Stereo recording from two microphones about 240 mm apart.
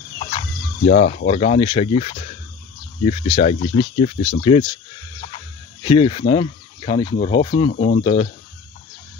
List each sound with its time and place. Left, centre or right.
0.8 s speech: left
7.7 s speech: left
8.0 s speech: left